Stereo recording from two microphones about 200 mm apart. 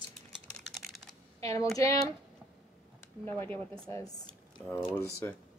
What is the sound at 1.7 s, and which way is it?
Speech, 15° left (ahead or behind).